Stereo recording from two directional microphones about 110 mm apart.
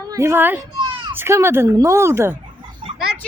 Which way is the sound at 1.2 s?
25° right (ahead or behind).